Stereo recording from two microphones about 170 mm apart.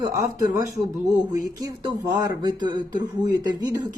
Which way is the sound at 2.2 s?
25° right (ahead or behind).